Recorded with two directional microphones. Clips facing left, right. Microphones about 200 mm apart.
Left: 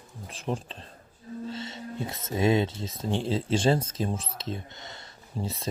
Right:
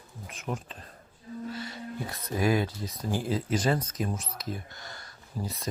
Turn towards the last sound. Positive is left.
turn(degrees=25)  # may be behind; listen again after turning